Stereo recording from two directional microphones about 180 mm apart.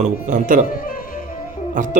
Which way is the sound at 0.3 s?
45° right (ahead or behind).